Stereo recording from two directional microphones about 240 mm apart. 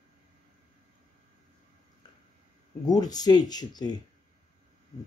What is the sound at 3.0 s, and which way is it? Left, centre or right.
Speech, centre.